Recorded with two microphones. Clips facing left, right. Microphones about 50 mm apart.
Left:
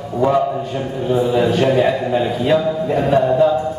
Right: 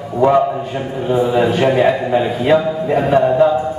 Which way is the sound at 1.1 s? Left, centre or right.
Centre.